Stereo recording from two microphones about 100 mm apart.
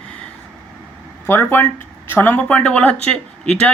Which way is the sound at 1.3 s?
20° left (ahead or behind).